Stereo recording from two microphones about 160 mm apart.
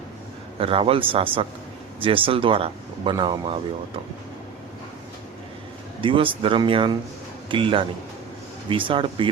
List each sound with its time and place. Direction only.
0.6 s speech: 35° right (ahead or behind)
6.0 s speech: 30° right (ahead or behind)